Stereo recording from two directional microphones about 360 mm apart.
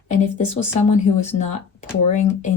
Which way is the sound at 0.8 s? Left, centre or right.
Centre.